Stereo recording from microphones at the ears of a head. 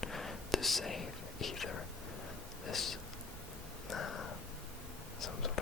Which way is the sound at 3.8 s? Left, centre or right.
Left.